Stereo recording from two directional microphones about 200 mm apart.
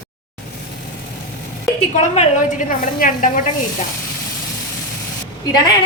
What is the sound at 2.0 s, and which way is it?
A woman's voice, 35° left (ahead or behind).